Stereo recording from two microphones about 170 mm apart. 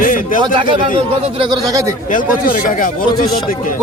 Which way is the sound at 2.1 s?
50° left (ahead or behind).